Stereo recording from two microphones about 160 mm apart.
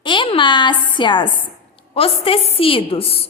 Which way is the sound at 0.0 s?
30° left (ahead or behind).